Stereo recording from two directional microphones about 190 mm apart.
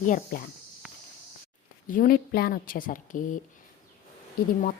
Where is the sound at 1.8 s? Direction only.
45° left (ahead or behind).